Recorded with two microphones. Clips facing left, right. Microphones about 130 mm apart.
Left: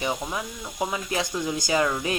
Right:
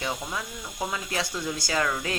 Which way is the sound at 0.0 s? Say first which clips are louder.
Left 3 dB; 20° left (ahead or behind).